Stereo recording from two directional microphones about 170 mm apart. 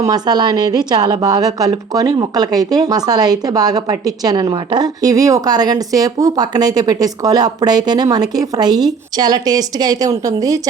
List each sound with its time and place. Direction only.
0.0 s a woman's voice: 25° right (ahead or behind)